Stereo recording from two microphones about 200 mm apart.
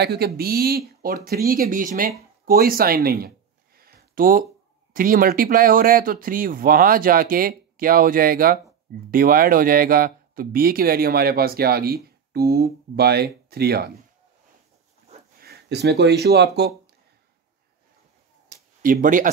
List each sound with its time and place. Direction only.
0.0 s speech: 55° right (ahead or behind)
3.8 s a sound: 45° right (ahead or behind)
4.9 s speech: 45° right (ahead or behind)
15.3 s speech: 50° right (ahead or behind)
18.8 s speech: 45° right (ahead or behind)